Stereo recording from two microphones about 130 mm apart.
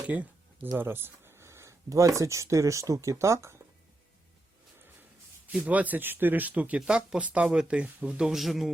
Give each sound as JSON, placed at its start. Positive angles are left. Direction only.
{"t": 0.0, "sound": "a sound", "side_deg": -15}
{"t": 0.8, "sound": "speech", "side_deg": -15}
{"t": 5.5, "sound": "speech", "side_deg": -10}